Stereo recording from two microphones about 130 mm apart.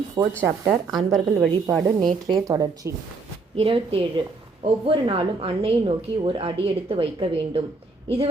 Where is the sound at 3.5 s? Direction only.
45° right (ahead or behind).